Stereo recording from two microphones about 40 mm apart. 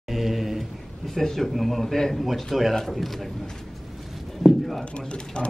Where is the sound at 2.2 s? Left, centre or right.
Centre.